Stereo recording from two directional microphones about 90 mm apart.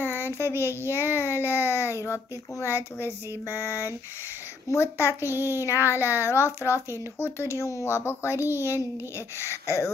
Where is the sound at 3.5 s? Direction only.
30° left (ahead or behind).